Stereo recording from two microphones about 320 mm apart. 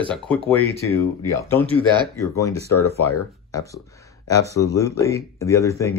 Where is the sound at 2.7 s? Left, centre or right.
Left.